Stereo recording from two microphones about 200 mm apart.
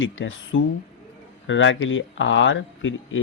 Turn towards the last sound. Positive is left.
turn(degrees=70)  # may be behind; listen again after turning